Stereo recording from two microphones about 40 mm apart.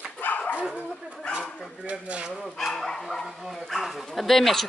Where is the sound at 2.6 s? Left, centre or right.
Centre.